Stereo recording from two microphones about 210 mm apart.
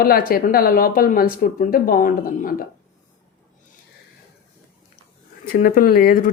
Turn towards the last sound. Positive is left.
turn(degrees=45)  # may be behind; listen again after turning